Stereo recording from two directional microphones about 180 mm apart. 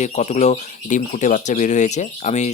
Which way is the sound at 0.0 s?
40° left (ahead or behind).